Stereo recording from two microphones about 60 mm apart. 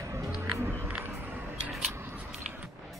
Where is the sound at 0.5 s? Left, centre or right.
Right.